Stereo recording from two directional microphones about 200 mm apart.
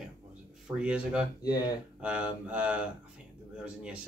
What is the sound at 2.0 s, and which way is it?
Speech, 5° right (ahead or behind).